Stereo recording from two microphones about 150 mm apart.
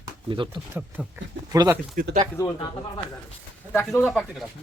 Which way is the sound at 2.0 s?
70° right (ahead or behind).